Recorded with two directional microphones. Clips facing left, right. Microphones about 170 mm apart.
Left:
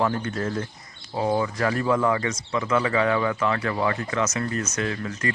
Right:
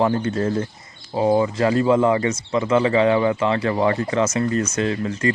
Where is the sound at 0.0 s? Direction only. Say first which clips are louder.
Right 5 dB; 30° right (ahead or behind).